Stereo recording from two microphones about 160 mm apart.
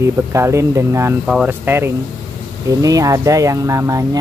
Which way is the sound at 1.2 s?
5° right (ahead or behind).